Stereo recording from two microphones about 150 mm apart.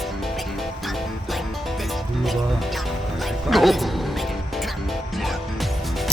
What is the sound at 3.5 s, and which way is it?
Music, centre (ahead or behind).